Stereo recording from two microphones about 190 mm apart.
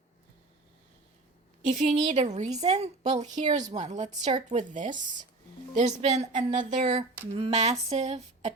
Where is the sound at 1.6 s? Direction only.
40° right (ahead or behind).